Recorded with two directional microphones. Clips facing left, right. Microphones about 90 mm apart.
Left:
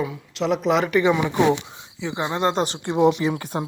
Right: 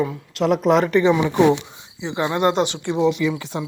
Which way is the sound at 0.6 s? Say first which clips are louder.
Right 4 dB; 40° right (ahead or behind).